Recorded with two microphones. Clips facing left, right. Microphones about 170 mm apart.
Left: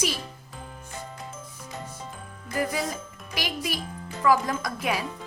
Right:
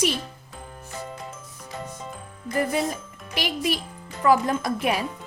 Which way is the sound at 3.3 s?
25° right (ahead or behind).